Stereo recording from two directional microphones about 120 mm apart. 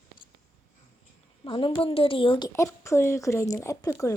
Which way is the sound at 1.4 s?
45° left (ahead or behind).